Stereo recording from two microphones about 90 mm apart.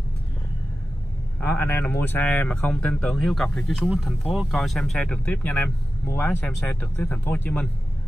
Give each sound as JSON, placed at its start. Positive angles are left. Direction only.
{"t": 1.6, "sound": "speech", "side_deg": 25}